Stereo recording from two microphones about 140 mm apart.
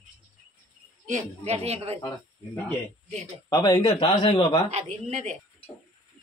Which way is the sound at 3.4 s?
30° left (ahead or behind).